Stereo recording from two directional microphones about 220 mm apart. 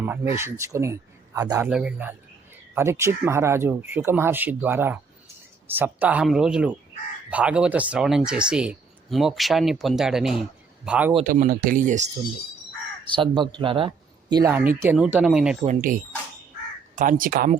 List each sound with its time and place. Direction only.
0.0 s speech: 10° right (ahead or behind)
11.3 s speech: 40° right (ahead or behind)
13.1 s speech: 20° right (ahead or behind); by 15.5 s 5° right (ahead or behind)
15.6 s speech: 35° right (ahead or behind)